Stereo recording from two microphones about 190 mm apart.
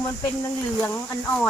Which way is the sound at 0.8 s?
5° left (ahead or behind).